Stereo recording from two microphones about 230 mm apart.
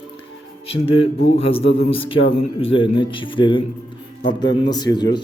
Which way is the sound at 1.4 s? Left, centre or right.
Left.